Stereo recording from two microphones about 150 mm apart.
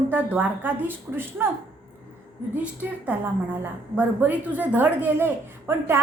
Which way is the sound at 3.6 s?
10° right (ahead or behind).